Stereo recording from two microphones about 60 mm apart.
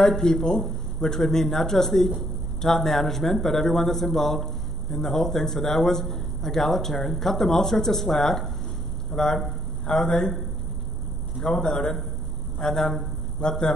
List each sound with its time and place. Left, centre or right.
0.0 s speech: centre